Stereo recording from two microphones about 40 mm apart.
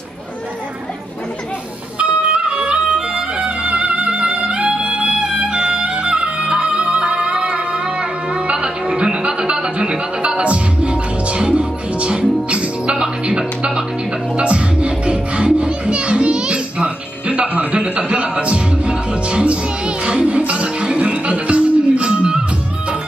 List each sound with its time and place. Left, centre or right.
2.0 s music: right